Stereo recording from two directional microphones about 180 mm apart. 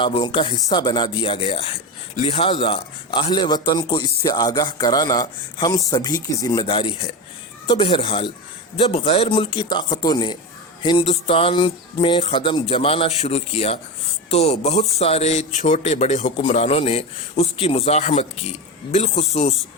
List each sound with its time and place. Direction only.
0.0 s a man's voice: 30° left (ahead or behind)